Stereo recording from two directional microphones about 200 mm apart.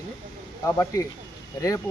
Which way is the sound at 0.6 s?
15° left (ahead or behind).